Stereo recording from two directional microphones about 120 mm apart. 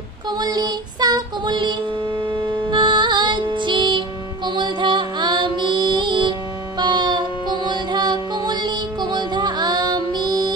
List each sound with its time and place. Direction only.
0.4 s music: 35° right (ahead or behind)